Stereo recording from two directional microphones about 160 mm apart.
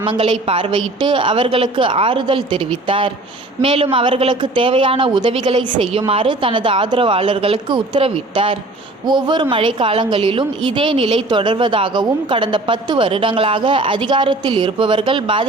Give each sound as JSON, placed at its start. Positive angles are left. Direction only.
{"t": 0.0, "sound": "a woman's voice", "side_deg": -30}